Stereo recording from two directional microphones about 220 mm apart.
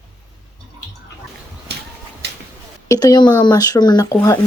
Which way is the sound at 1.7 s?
50° right (ahead or behind).